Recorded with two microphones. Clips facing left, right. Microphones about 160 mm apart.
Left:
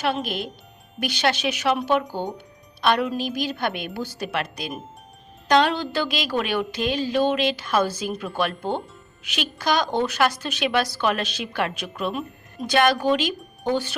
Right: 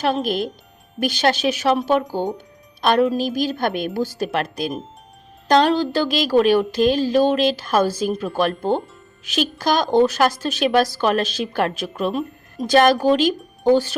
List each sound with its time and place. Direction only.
0.0 s a woman's voice: 40° right (ahead or behind)